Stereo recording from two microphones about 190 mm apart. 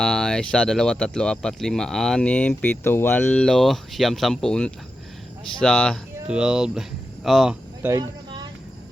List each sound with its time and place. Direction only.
0.0 s speech: 5° left (ahead or behind)
6.2 s speech: 5° right (ahead or behind)
7.9 s vehicle: 20° right (ahead or behind)